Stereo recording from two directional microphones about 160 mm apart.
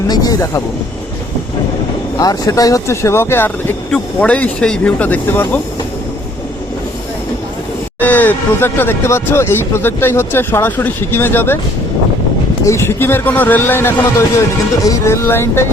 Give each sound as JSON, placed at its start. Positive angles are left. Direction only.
{"t": 0.1, "sound": "speech", "side_deg": 25}
{"t": 2.1, "sound": "speech", "side_deg": 25}
{"t": 7.9, "sound": "speech", "side_deg": 10}
{"t": 12.6, "sound": "speech", "side_deg": 15}